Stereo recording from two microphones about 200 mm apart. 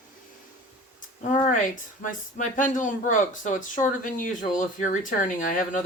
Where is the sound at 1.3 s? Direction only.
40° left (ahead or behind).